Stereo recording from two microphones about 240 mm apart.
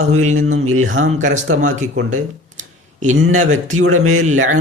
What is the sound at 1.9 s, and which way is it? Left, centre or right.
Speech, right.